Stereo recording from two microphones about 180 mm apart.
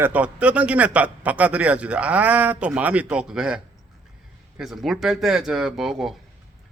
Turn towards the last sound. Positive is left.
turn(degrees=0)  # may be behind; listen again after turning